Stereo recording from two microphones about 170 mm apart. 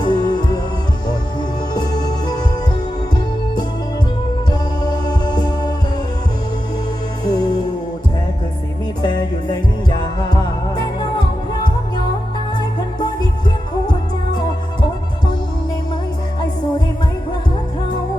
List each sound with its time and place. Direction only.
0.0 s music: 25° left (ahead or behind)
4.8 s music: 25° left (ahead or behind)
7.3 s music: 25° left (ahead or behind)
9.0 s music: 25° left (ahead or behind)